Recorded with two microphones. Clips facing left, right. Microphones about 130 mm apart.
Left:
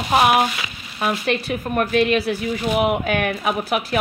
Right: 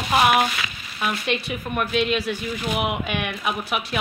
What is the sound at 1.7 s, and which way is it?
Speech, 45° left (ahead or behind).